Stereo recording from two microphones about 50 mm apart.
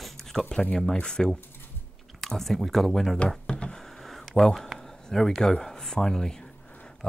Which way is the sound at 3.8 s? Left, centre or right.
Centre.